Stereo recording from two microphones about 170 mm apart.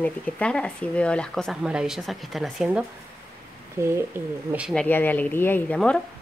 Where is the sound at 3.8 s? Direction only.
15° right (ahead or behind).